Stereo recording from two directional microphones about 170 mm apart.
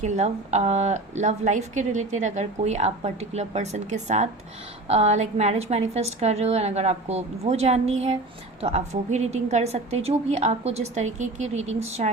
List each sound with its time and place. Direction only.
0.0 s a woman's voice: 40° right (ahead or behind)